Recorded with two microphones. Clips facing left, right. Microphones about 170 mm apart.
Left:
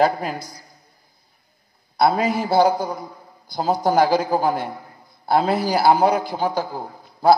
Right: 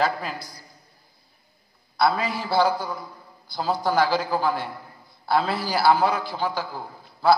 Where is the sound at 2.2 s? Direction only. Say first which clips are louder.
Left 5 dB; 20° left (ahead or behind).